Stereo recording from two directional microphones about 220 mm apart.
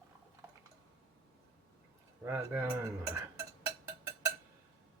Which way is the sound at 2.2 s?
10° right (ahead or behind).